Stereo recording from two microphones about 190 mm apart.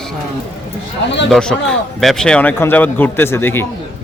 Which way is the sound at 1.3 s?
5° left (ahead or behind).